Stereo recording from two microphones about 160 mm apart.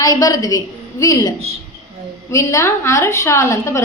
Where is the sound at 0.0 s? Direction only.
25° left (ahead or behind).